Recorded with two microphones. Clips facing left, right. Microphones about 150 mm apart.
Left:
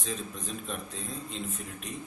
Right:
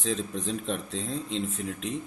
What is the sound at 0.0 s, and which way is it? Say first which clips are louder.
Speech: right 7 dB; 85° right.